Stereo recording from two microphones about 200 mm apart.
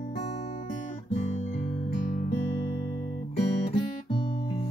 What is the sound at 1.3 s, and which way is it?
Guitar, 40° left (ahead or behind).